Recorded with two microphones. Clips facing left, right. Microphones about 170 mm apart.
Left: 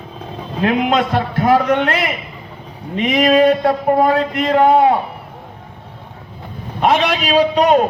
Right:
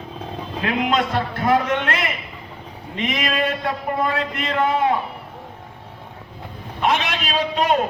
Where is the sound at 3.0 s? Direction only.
40° left (ahead or behind).